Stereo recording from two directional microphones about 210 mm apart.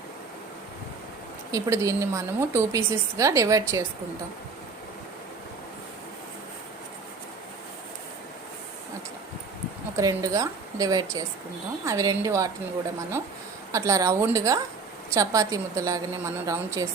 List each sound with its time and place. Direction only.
1.5 s a woman's voice: 15° right (ahead or behind)
10.0 s a woman's voice: 15° right (ahead or behind)
13.7 s a woman's voice: 15° right (ahead or behind)